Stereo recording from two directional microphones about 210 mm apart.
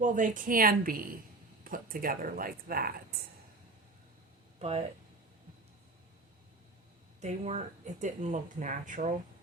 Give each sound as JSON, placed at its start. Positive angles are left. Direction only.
{"t": 0.0, "sound": "speech", "side_deg": -40}
{"t": 4.6, "sound": "speech", "side_deg": -30}
{"t": 7.2, "sound": "speech", "side_deg": -30}